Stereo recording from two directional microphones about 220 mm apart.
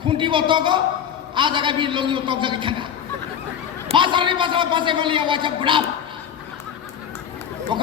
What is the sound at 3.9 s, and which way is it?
A man's voice, 20° right (ahead or behind).